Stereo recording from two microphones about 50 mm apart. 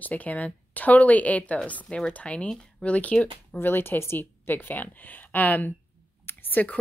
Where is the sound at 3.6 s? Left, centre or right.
Left.